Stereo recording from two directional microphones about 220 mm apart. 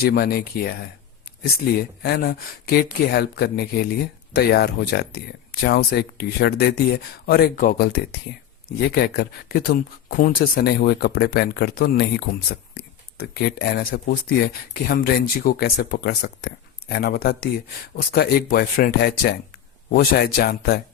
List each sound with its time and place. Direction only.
0.0 s speech: 45° left (ahead or behind)
1.8 s speech: 45° left (ahead or behind)